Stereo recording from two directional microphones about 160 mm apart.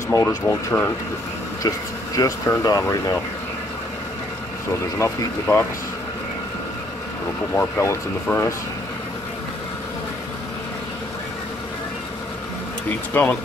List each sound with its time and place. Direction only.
0.1 s speech: 20° left (ahead or behind)
2.1 s speech: 15° left (ahead or behind)
4.9 s speech: 15° left (ahead or behind)
7.5 s speech: 15° left (ahead or behind)
13.1 s speech: 10° left (ahead or behind)